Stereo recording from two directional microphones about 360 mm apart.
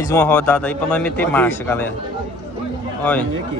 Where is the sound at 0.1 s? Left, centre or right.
Centre.